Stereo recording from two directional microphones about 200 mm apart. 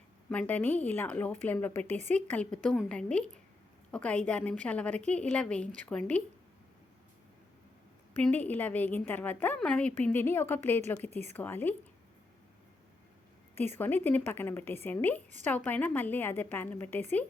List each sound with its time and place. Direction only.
0.3 s a woman's voice: 5° left (ahead or behind)
8.2 s a woman's voice: 10° left (ahead or behind)
11.1 s a woman's voice: 35° right (ahead or behind)
11.3 s a woman's voice: 10° left (ahead or behind)
13.7 s a woman's voice: 10° left (ahead or behind)